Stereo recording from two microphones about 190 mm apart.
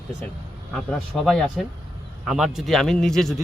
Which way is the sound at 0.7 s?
Centre (ahead or behind).